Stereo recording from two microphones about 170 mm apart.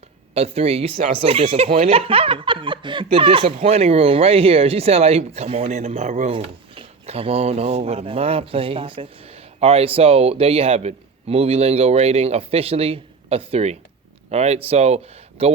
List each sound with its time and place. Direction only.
0.3 s speech: 35° right (ahead or behind)